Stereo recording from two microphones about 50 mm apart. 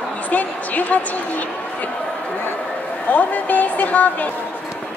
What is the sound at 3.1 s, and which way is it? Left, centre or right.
A woman's voice, left.